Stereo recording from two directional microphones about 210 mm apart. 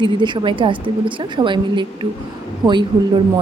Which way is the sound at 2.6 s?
Centre (ahead or behind).